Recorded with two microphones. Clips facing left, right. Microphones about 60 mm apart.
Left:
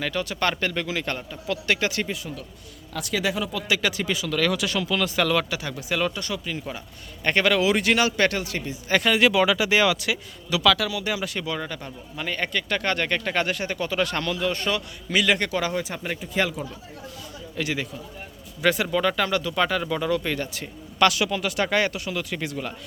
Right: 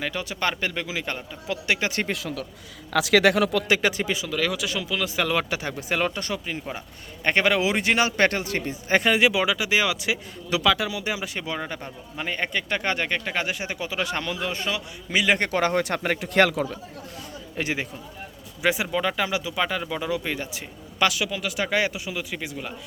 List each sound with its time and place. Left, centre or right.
0.0 s speech: centre
2.0 s speech: right
3.7 s speech: right
4.3 s speech: centre
5.3 s speech: right; by 10.0 s centre
10.0 s speech: right
15.3 s speech: right
15.8 s speech: right
17.6 s speech: right
18.6 s speech: centre